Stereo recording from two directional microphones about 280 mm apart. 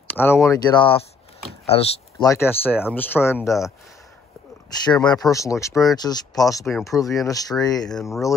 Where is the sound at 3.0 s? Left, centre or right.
Centre.